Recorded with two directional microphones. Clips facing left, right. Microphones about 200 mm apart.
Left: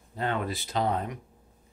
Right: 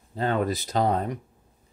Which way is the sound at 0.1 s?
35° right (ahead or behind).